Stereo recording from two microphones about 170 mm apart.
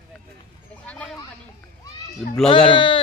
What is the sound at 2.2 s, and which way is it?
Speech, 5° left (ahead or behind).